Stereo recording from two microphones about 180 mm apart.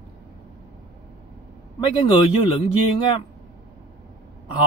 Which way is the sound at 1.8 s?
30° left (ahead or behind).